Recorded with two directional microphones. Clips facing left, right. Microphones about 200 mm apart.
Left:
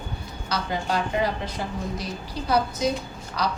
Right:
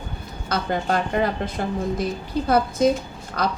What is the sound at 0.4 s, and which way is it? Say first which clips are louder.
Speech: right 4 dB; 50° right (ahead or behind).